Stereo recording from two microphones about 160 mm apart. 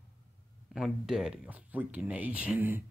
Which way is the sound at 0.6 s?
Centre (ahead or behind).